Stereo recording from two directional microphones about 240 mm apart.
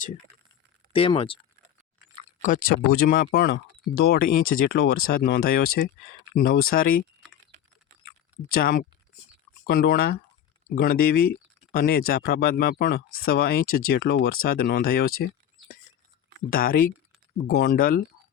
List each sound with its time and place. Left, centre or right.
0.9 s speech: left
2.4 s speech: left
7.5 s typing: right
8.0 s a sound: left
9.6 s speech: left
16.5 s speech: left